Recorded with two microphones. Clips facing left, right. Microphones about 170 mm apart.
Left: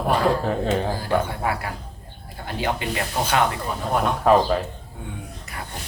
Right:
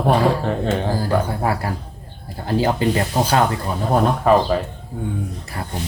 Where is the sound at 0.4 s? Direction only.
Centre (ahead or behind).